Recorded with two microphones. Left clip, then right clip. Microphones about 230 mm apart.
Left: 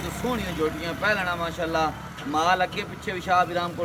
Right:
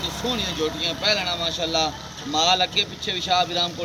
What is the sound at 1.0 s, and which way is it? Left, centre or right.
Speech, centre.